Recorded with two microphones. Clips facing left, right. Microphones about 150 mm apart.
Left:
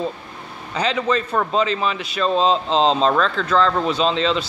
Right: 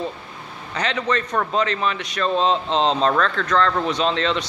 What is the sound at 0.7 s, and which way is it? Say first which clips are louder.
Speech: left 3 dB; 10° left (ahead or behind).